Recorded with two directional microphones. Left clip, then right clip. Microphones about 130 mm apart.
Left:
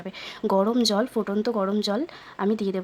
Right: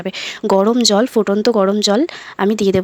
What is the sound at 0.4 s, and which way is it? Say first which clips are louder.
Speech: right 9 dB; 35° right (ahead or behind).